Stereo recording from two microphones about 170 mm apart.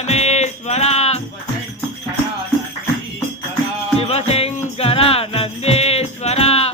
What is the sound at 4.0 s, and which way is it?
Music, 35° left (ahead or behind).